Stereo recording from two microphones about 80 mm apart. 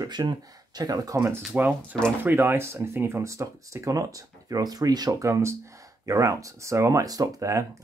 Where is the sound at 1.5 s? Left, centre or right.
Right.